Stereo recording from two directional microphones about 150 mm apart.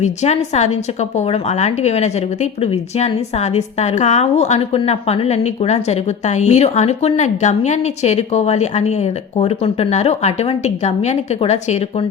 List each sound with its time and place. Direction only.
0.0 s a woman's voice: 50° left (ahead or behind)